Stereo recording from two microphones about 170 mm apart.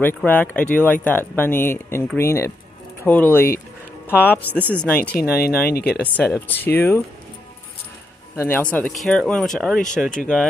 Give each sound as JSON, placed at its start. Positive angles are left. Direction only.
{"t": 0.0, "sound": "speech", "side_deg": 10}
{"t": 5.7, "sound": "speech", "side_deg": 65}
{"t": 6.1, "sound": "speech", "side_deg": 10}
{"t": 8.4, "sound": "speech", "side_deg": 10}